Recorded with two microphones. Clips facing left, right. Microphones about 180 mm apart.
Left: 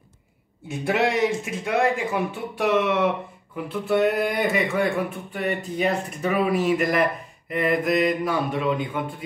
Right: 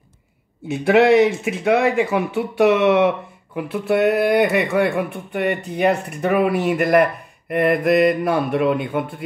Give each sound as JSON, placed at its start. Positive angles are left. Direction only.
{"t": 0.7, "sound": "speech", "side_deg": -70}